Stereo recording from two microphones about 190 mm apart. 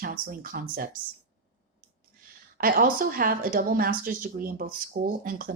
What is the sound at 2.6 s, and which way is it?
A woman's voice, 50° right (ahead or behind).